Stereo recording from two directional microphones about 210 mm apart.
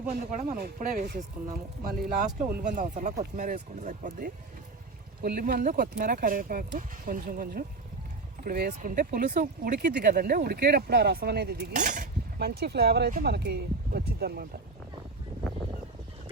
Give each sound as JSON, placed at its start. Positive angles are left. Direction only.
{"t": 0.1, "sound": "speech", "side_deg": -35}